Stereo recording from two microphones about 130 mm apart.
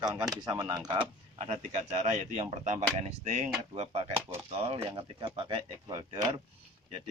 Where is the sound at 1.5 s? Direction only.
55° right (ahead or behind); by 6.3 s 35° right (ahead or behind).